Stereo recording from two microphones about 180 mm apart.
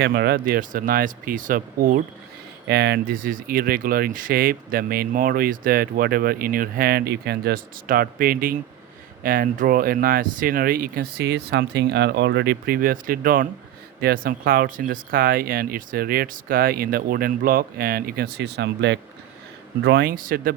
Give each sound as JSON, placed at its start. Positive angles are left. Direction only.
{"t": 0.0, "sound": "speech", "side_deg": -65}
{"t": 2.6, "sound": "speech", "side_deg": -65}